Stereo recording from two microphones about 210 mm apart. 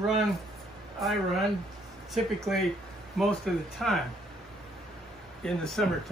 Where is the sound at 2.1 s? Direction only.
Centre (ahead or behind).